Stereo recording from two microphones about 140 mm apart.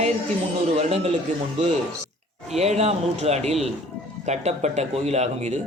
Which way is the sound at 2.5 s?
50° right (ahead or behind).